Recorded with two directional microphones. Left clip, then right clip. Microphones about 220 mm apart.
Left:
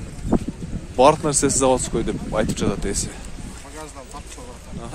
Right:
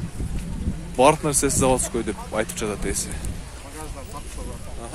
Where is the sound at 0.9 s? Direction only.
10° left (ahead or behind).